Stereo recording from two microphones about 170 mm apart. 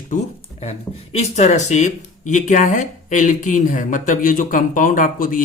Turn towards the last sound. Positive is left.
turn(degrees=50)  # may be behind; listen again after turning